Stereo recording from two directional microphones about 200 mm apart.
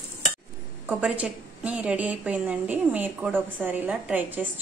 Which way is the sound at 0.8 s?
5° right (ahead or behind).